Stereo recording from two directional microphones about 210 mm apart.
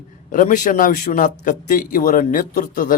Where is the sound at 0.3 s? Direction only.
40° left (ahead or behind).